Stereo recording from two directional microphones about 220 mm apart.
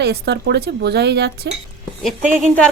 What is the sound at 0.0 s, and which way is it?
Speech, 50° right (ahead or behind).